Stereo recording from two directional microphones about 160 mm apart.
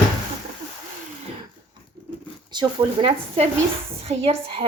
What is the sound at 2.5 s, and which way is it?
Speech, 30° right (ahead or behind).